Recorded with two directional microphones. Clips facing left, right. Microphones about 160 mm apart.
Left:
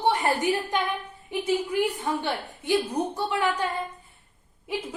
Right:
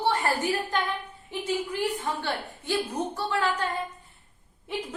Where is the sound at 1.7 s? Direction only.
15° left (ahead or behind).